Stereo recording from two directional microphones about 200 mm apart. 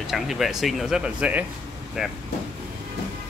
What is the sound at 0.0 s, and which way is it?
Speech, centre (ahead or behind).